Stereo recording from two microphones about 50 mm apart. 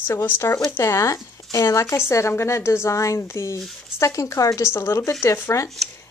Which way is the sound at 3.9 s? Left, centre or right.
Left.